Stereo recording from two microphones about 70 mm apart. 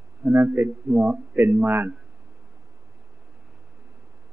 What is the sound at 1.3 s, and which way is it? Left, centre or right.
Speech, right.